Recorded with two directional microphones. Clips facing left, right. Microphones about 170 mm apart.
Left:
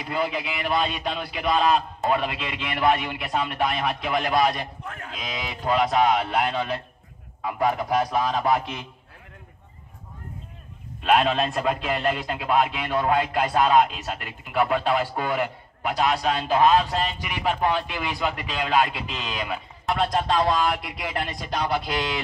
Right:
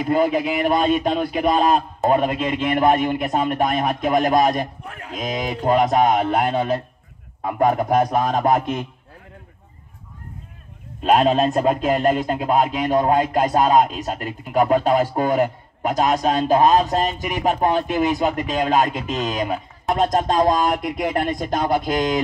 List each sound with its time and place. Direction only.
0.0 s speech: 45° right (ahead or behind)
11.0 s speech: 40° right (ahead or behind)